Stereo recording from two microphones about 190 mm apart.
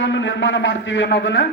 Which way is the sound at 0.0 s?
75° left (ahead or behind).